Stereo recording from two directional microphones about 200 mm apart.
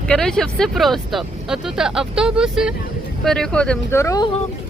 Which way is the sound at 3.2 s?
5° left (ahead or behind).